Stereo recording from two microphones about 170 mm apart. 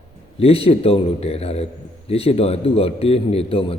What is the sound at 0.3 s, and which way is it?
A man's voice, 35° left (ahead or behind).